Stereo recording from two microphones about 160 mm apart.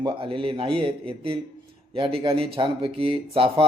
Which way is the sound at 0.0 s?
35° right (ahead or behind).